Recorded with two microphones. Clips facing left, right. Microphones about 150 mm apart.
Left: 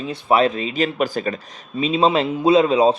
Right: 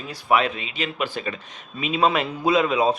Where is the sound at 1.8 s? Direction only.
30° left (ahead or behind).